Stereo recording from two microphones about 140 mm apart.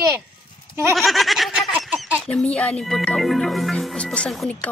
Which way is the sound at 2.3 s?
5° left (ahead or behind).